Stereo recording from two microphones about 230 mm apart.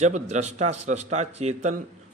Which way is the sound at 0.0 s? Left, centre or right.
Right.